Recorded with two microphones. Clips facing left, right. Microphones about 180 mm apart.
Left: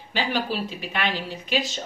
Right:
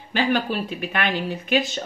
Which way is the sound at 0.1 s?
55° right (ahead or behind).